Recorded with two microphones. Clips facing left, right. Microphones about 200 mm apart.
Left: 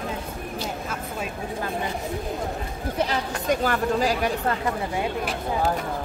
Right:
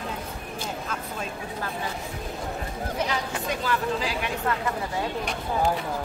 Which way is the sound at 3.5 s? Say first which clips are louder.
Left 5 dB; 45° left (ahead or behind).